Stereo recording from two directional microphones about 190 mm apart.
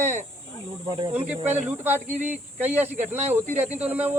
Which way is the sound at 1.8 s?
10° right (ahead or behind).